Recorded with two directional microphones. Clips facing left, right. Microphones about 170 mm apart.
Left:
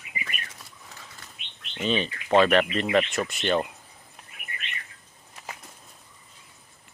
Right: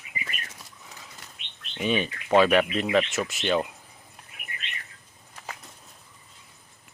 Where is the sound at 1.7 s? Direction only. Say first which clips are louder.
Even; 10° right (ahead or behind).